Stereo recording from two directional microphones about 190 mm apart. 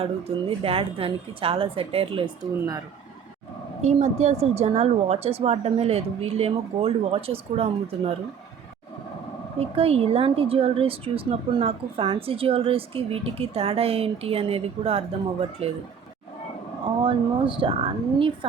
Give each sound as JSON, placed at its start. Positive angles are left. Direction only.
{"t": 0.0, "sound": "a woman's voice", "side_deg": -30}
{"t": 3.8, "sound": "speech", "side_deg": -35}
{"t": 9.6, "sound": "speech", "side_deg": -30}
{"t": 17.0, "sound": "a woman's voice", "side_deg": -25}